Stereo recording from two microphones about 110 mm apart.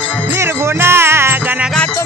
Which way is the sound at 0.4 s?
25° right (ahead or behind).